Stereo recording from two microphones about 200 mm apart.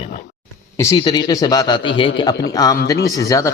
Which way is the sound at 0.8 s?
20° left (ahead or behind).